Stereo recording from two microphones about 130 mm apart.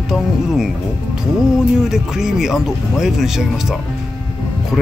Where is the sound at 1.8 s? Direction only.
5° right (ahead or behind).